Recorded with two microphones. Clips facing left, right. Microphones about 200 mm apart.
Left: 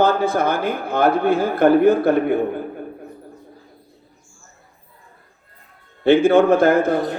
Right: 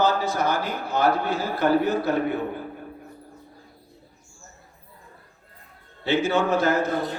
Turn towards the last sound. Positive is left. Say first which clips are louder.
# left 8 dB
turn(degrees=55)  # may be behind; listen again after turning